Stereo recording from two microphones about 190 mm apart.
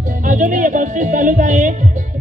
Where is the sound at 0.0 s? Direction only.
40° right (ahead or behind).